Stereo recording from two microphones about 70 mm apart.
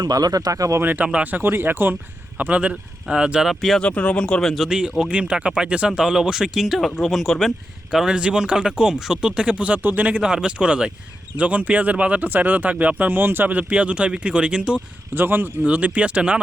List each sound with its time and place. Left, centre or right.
0.0 s speech: right
0.8 s speech: right
3.5 s speech: centre
3.8 s speech: centre
4.5 s speech: centre
7.9 s speech: centre
15.1 s speech: right